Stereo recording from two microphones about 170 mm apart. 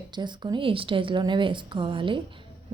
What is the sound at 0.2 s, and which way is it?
A woman's voice, 25° right (ahead or behind).